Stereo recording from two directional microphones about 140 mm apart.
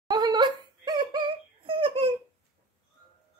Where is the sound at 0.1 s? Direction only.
30° right (ahead or behind).